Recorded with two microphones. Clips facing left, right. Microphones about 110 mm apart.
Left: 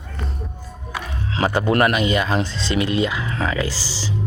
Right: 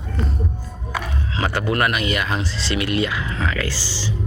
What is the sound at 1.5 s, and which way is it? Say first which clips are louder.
Speech: left 4 dB; 25° left (ahead or behind).